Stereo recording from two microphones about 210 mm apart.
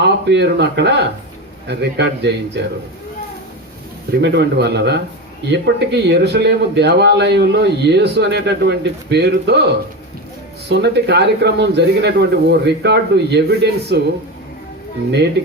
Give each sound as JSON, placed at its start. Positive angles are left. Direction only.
{"t": 0.0, "sound": "speech", "side_deg": -55}
{"t": 4.2, "sound": "speech", "side_deg": -55}
{"t": 10.7, "sound": "speech", "side_deg": -55}